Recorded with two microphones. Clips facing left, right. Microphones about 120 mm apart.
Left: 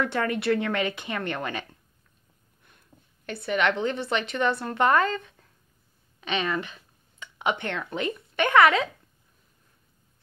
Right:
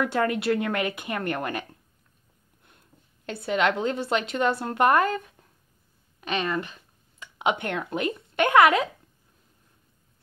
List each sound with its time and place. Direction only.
0.0 s speech: 10° right (ahead or behind)
3.3 s speech: 20° right (ahead or behind)
6.3 s a sound: centre (ahead or behind)
7.3 s speech: 15° right (ahead or behind)